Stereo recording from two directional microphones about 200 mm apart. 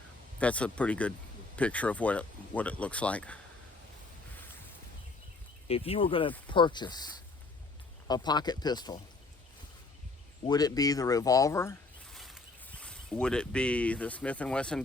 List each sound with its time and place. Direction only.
0.3 s speech: 5° left (ahead or behind)
5.6 s speech: 30° left (ahead or behind)
10.4 s speech: 20° left (ahead or behind)
12.1 s speech: centre (ahead or behind)